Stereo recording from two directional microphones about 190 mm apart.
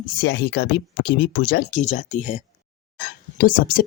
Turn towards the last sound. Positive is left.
turn(degrees=45)  # may be behind; listen again after turning